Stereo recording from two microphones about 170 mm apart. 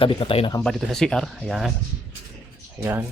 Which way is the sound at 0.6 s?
Centre (ahead or behind).